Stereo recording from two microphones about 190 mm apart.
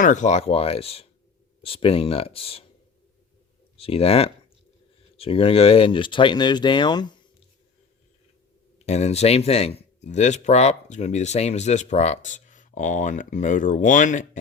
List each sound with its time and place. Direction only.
0.0 s speech: 40° left (ahead or behind)
3.8 s speech: 30° left (ahead or behind)
8.9 s speech: 35° left (ahead or behind)